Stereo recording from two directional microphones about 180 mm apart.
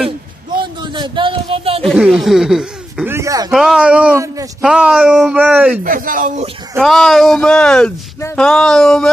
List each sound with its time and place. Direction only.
0.9 s speech: 25° right (ahead or behind)
1.8 s speech: centre (ahead or behind)
3.2 s speech: 15° right (ahead or behind)
3.5 s a man's voice: centre (ahead or behind)
5.9 s speech: 50° right (ahead or behind)
6.8 s speech: centre (ahead or behind)